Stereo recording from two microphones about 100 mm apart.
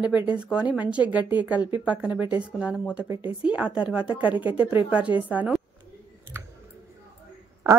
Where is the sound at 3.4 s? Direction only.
10° right (ahead or behind).